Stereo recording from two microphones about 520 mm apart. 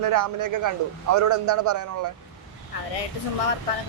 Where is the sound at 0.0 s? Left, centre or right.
Right.